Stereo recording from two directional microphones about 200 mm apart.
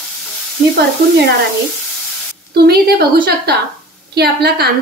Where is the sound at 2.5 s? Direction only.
50° right (ahead or behind).